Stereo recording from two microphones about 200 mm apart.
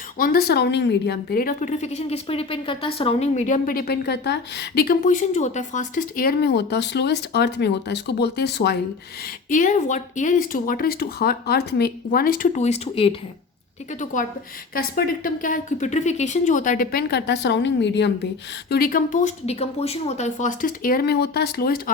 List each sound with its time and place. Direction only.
0.2 s a woman's voice: 50° left (ahead or behind)
9.5 s speech: 40° left (ahead or behind)
14.0 s a woman's voice: 40° left (ahead or behind); by 18.3 s 60° left (ahead or behind)
18.7 s a woman's voice: 45° left (ahead or behind)